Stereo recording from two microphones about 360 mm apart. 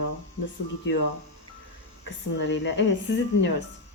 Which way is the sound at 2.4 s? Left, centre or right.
Left.